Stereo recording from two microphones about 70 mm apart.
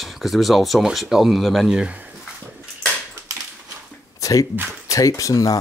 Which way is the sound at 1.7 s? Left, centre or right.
Centre.